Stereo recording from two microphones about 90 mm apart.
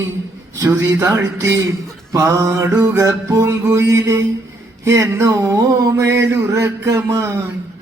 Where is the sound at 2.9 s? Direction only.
40° right (ahead or behind).